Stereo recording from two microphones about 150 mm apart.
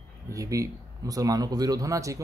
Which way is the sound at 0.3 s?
20° right (ahead or behind).